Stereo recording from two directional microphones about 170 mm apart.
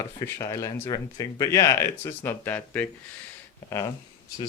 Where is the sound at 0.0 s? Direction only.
20° left (ahead or behind).